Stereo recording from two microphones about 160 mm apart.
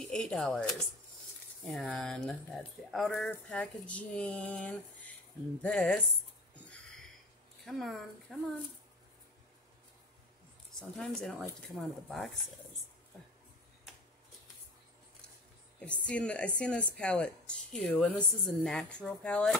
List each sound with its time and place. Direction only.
0.0 s speech: 5° left (ahead or behind)
7.6 s speech: centre (ahead or behind)
10.7 s speech: 5° left (ahead or behind)
15.8 s speech: 5° left (ahead or behind)